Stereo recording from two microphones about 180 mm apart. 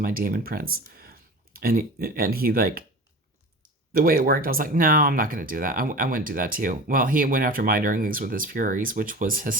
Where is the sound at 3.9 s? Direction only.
55° right (ahead or behind).